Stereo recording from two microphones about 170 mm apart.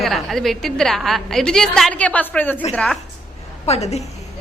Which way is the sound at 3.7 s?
40° left (ahead or behind).